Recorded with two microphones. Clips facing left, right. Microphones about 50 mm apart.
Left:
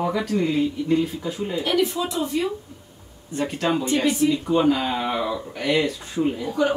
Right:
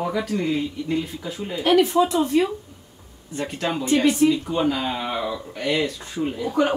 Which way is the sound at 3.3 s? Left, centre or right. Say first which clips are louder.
Left 3 dB; centre.